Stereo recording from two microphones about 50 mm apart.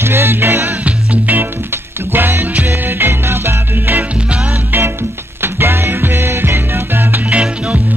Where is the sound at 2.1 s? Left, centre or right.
Right.